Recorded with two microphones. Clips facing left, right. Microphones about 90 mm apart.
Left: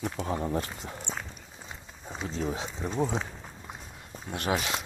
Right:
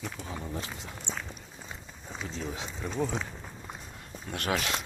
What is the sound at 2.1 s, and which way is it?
Speech, 35° left (ahead or behind).